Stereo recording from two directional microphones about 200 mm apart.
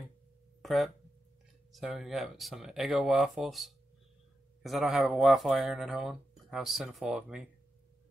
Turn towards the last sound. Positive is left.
turn(degrees=-5)  # may be behind; listen again after turning